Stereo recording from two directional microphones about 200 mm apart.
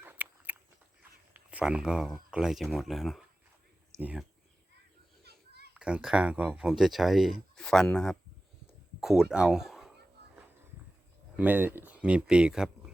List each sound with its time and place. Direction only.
0.0 s biting: 10° right (ahead or behind)
1.3 s speech: 5° right (ahead or behind)
5.2 s children playing: 55° right (ahead or behind)
5.7 s speech: 5° right (ahead or behind)
11.3 s speech: 10° right (ahead or behind)